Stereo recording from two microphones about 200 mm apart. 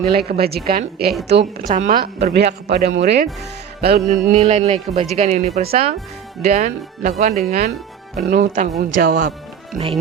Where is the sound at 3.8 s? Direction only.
50° right (ahead or behind).